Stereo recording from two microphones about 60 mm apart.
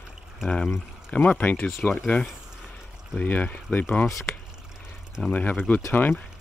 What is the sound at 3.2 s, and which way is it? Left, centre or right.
Speech, left.